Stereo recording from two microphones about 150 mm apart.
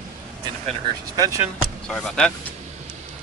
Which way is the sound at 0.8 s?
25° right (ahead or behind).